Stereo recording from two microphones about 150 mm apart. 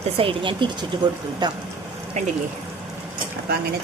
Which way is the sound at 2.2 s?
50° right (ahead or behind).